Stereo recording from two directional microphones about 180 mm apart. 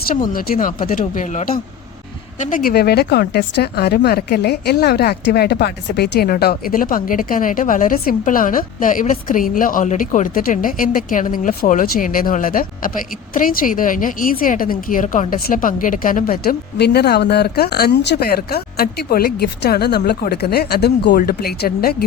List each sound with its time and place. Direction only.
0.3 s a woman's voice: 50° left (ahead or behind)